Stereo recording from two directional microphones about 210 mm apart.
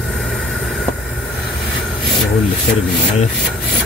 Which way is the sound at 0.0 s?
Centre (ahead or behind).